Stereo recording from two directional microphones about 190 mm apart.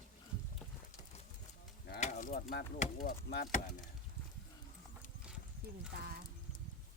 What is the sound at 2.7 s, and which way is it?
Speech, 45° left (ahead or behind).